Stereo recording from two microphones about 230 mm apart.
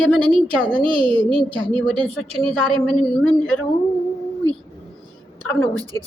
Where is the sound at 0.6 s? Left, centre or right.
Right.